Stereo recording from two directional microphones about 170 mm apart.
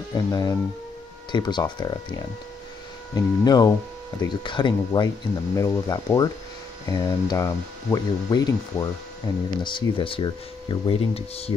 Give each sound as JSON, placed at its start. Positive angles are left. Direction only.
{"t": 0.1, "sound": "speech", "side_deg": 20}